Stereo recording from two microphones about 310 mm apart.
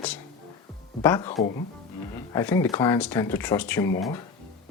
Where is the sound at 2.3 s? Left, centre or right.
Centre.